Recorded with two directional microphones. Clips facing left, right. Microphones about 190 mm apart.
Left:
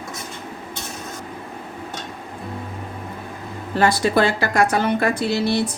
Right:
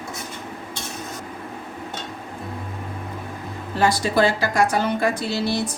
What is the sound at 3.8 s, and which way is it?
A woman's voice, 60° left (ahead or behind).